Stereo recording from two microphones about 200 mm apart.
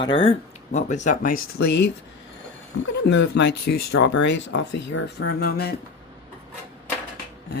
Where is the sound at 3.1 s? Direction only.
60° left (ahead or behind).